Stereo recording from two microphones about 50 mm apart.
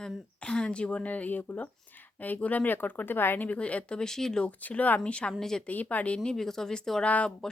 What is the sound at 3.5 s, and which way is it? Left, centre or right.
Speech, left.